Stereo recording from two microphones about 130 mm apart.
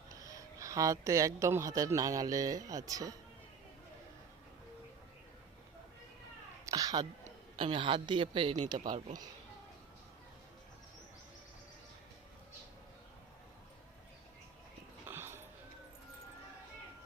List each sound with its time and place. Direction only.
0.1 s a woman's voice: 25° right (ahead or behind)
6.7 s a sound: 30° right (ahead or behind)
7.6 s speech: 40° right (ahead or behind)
15.0 s music: 20° right (ahead or behind)